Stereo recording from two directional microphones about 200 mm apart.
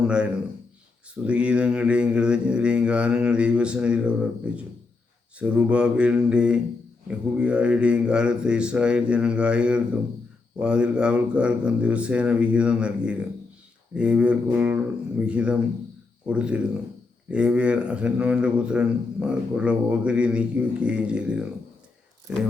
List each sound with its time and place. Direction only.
0.0 s a man's voice: 5° right (ahead or behind)